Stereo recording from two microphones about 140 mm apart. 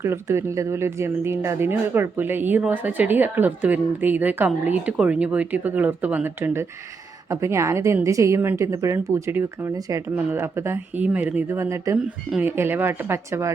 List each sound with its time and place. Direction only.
0.0 s a woman's voice: 20° right (ahead or behind)